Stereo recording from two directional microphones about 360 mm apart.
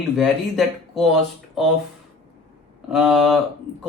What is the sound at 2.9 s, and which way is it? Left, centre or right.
Speech, centre.